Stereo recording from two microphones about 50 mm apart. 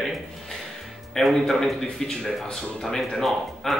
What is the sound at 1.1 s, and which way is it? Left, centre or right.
Speech, centre.